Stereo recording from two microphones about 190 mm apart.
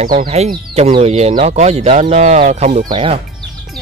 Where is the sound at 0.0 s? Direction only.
45° right (ahead or behind).